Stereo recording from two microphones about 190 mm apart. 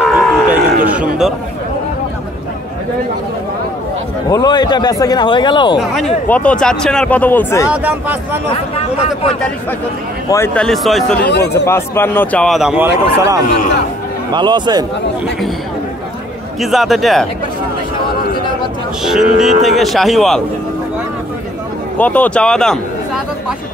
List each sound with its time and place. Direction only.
0.0 s a sound: 5° right (ahead or behind)
4.3 s speech: 20° left (ahead or behind)
5.8 s speech: centre (ahead or behind)
7.7 s speech: 10° right (ahead or behind)
8.5 s speech: 30° left (ahead or behind)
10.3 s speech: 10° left (ahead or behind)
11.2 s speech: 60° left (ahead or behind)
11.6 s speech: 15° left (ahead or behind); by 13.4 s 15° right (ahead or behind)
14.3 s a man's voice: 25° right (ahead or behind)
16.7 s speech: centre (ahead or behind)
19.0 s speech: 5° right (ahead or behind)
21.9 s a man's voice: 10° left (ahead or behind)